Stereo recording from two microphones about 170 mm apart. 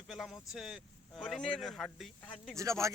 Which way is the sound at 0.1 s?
Centre (ahead or behind).